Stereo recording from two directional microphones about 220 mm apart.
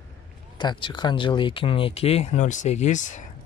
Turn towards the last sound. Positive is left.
turn(degrees=35)  # may be behind; listen again after turning